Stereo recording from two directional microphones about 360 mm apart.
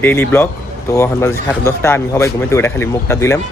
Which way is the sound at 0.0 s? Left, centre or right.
Centre.